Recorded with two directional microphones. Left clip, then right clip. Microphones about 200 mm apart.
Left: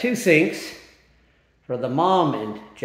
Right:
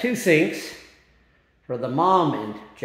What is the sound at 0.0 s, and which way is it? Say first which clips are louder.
Speech: left 1 dB; 5° left (ahead or behind).